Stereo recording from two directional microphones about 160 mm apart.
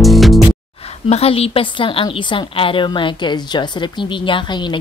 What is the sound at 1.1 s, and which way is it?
A woman's voice, 40° left (ahead or behind).